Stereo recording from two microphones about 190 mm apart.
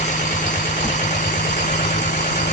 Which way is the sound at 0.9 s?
40° left (ahead or behind).